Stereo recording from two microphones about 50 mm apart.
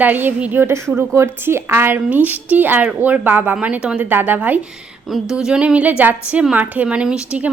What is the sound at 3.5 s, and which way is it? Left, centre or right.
Speech, right.